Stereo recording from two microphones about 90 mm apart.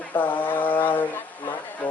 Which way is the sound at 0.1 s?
20° left (ahead or behind).